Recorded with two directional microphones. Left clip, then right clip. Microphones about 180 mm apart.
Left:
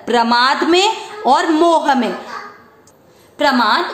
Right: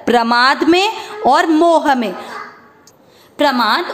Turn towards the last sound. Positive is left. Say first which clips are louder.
# even
turn(degrees=-45)  # may be behind; listen again after turning